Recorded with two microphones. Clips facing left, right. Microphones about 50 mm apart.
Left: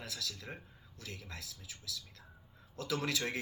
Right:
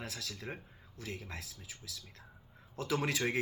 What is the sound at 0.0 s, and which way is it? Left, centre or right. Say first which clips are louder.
Speech: right 1 dB; right.